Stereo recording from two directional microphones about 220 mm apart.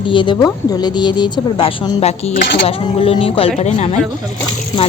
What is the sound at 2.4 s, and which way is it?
Speech, 50° left (ahead or behind).